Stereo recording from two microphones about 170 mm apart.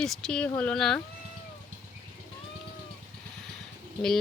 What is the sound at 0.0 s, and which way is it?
Speech, 5° left (ahead or behind).